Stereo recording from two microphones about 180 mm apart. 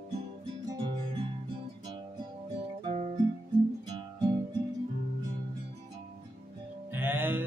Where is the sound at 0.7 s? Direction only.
25° right (ahead or behind).